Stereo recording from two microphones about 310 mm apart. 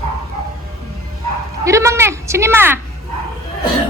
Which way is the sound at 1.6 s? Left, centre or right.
Centre.